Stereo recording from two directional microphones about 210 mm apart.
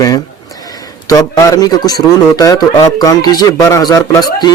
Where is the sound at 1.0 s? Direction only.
15° left (ahead or behind).